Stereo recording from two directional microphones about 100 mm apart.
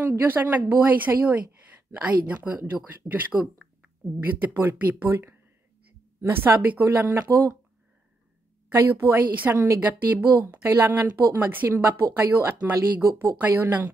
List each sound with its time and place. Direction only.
0.1 s a woman's voice: 20° right (ahead or behind)
7.2 s speech: 30° right (ahead or behind)
8.7 s speech: 25° right (ahead or behind)
13.4 s a woman's voice: 15° right (ahead or behind)